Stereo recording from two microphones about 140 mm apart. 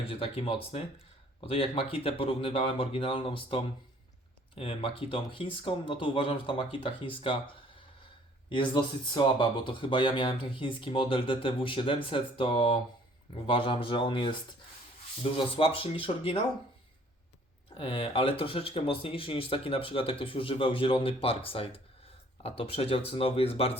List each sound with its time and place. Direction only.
0.1 s speech: 40° left (ahead or behind)
17.7 s speech: 45° left (ahead or behind)